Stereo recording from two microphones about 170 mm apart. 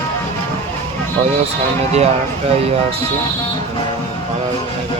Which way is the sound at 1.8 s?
40° right (ahead or behind).